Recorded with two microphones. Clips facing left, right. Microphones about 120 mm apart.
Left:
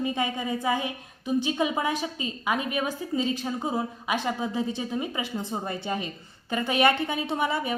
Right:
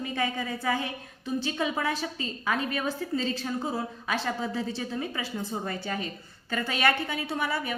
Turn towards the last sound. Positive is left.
turn(degrees=20)  # may be behind; listen again after turning